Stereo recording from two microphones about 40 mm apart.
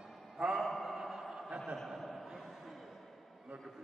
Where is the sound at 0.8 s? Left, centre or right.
Centre.